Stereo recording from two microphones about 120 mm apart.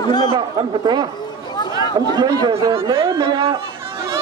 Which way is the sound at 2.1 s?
35° right (ahead or behind).